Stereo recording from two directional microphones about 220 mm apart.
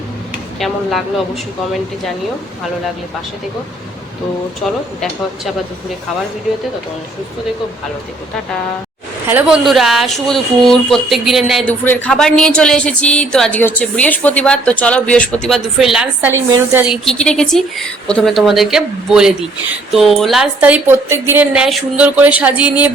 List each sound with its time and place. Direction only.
0.6 s speech: centre (ahead or behind)
9.2 s speech: 5° right (ahead or behind)